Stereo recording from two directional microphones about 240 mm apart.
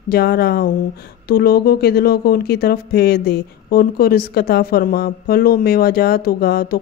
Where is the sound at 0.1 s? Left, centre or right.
Left.